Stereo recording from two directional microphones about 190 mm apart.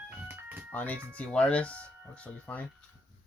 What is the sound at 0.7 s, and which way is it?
Speech, 10° left (ahead or behind).